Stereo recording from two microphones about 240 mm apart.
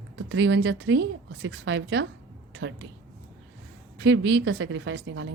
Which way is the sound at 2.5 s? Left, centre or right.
Right.